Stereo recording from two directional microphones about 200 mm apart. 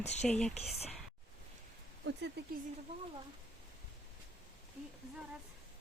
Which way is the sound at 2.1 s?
65° right (ahead or behind).